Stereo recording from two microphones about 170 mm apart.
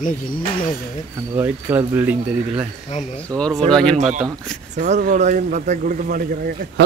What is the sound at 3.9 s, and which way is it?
Speech, 45° right (ahead or behind).